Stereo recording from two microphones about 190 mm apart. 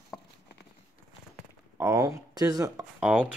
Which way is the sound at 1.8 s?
15° right (ahead or behind).